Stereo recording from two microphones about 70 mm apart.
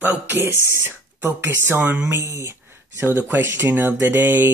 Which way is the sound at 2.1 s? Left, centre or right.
Right.